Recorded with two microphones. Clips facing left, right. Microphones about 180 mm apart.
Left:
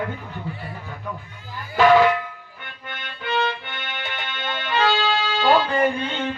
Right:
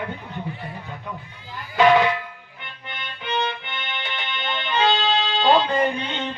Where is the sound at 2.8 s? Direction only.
20° right (ahead or behind).